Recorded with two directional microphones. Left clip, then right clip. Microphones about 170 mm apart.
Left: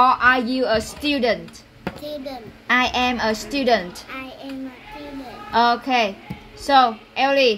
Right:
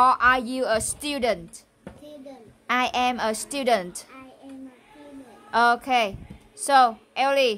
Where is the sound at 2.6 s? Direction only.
45° right (ahead or behind).